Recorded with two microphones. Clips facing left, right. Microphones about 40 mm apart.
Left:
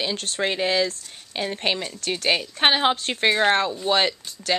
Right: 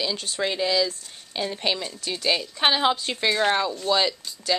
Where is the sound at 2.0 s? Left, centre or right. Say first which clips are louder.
Left 2 dB; left.